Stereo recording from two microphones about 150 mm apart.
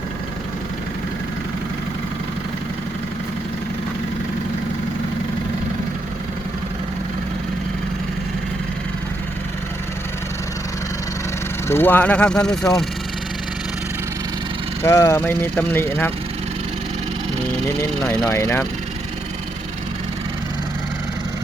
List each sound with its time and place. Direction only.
11.7 s speech: 15° left (ahead or behind)
14.8 s speech: 20° left (ahead or behind)
18.3 s speech: 20° left (ahead or behind)